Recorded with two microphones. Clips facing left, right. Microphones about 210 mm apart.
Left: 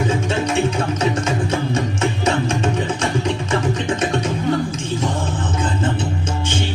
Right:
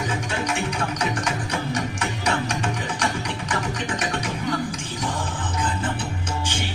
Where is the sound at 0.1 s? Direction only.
25° left (ahead or behind).